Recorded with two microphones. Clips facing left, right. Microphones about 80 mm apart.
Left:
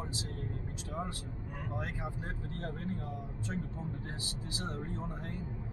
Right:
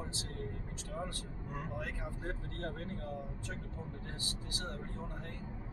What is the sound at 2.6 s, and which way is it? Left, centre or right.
Speech, centre.